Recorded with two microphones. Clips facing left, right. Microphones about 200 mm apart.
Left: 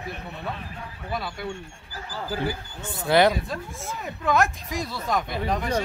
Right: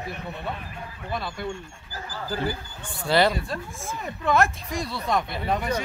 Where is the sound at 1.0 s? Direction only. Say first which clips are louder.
Even; 5° left (ahead or behind).